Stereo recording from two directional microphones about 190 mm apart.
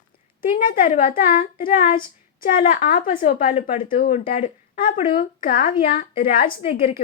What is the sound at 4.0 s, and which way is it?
A woman's voice, 45° left (ahead or behind).